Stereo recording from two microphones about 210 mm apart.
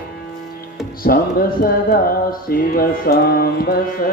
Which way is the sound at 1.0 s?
45° left (ahead or behind).